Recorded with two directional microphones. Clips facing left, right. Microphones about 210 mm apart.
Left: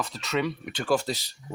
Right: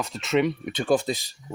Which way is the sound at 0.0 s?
20° right (ahead or behind).